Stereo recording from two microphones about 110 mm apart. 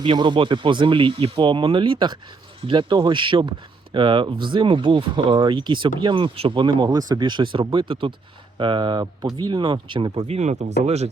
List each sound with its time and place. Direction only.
0.0 s speech: 45° right (ahead or behind)
10.2 s speech: 75° right (ahead or behind)